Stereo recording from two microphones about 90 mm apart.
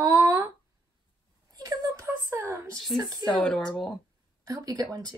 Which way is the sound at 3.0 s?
45° right (ahead or behind).